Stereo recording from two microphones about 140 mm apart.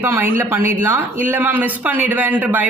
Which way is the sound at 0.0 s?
15° right (ahead or behind).